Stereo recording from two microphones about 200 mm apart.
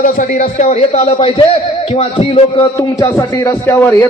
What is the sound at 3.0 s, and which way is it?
A man's voice, 15° left (ahead or behind).